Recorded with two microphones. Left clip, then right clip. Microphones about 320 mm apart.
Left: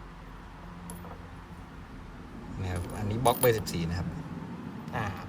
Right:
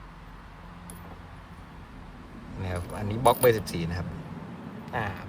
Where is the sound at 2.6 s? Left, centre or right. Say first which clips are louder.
Right 3 dB; centre.